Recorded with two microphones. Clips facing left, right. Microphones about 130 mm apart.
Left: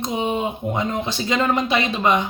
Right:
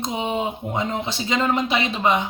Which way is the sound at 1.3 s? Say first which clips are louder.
Left 1 dB; 20° right (ahead or behind).